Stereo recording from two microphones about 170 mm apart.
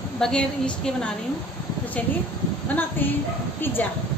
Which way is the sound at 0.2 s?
5° left (ahead or behind).